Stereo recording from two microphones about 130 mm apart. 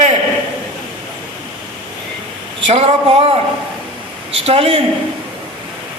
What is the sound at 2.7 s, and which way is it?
Speech, 50° right (ahead or behind).